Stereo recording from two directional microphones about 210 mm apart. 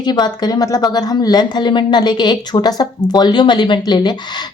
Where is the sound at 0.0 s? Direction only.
20° left (ahead or behind).